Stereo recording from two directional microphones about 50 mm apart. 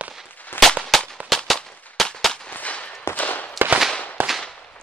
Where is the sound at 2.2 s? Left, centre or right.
Centre.